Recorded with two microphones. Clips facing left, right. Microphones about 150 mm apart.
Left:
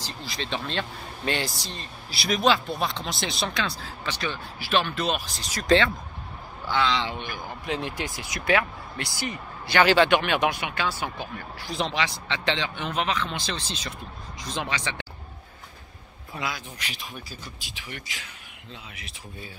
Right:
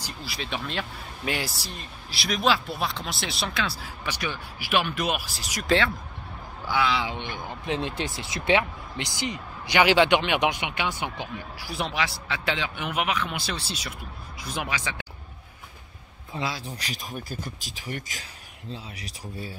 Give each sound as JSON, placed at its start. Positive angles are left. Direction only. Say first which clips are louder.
{"t": 0.0, "sound": "speech", "louder": "left 1 dB", "side_deg": -10}
{"t": 7.2, "sound": "speech", "louder": "right 1 dB", "side_deg": -25}
{"t": 16.3, "sound": "speech", "louder": "right 2 dB", "side_deg": -30}